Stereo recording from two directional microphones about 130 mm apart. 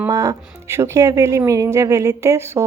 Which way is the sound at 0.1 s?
25° right (ahead or behind).